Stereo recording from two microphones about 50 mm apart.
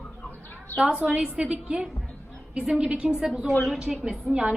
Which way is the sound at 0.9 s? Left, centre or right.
Right.